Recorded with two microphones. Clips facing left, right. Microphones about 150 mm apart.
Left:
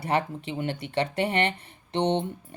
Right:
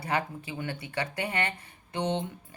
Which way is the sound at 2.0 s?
60° left (ahead or behind).